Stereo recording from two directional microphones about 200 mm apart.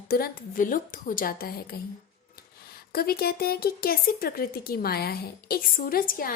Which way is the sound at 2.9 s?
50° left (ahead or behind).